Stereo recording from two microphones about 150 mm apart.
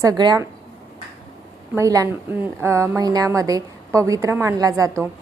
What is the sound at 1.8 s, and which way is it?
A woman's voice, 20° right (ahead or behind).